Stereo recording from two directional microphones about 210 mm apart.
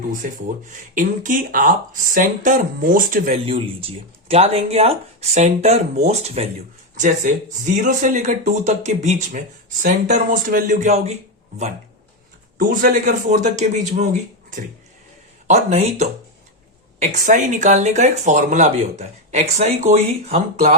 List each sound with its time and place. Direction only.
0.2 s speech: 40° right (ahead or behind)
3.4 s speech: 25° right (ahead or behind)